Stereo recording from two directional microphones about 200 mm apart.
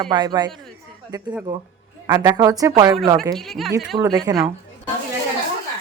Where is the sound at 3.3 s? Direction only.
Centre (ahead or behind).